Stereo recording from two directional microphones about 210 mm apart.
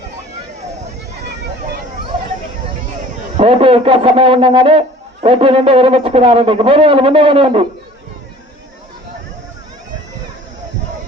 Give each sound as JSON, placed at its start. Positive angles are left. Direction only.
{"t": 3.3, "sound": "a man's voice", "side_deg": -25}